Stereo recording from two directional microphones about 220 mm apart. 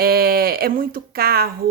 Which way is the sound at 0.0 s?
45° right (ahead or behind).